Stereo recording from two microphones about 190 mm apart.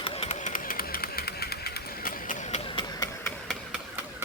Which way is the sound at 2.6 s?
25° left (ahead or behind).